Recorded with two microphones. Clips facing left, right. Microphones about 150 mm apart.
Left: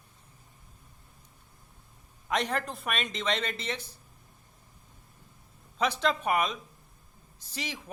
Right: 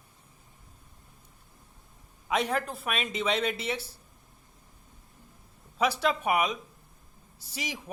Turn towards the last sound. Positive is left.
turn(degrees=-10)  # may be behind; listen again after turning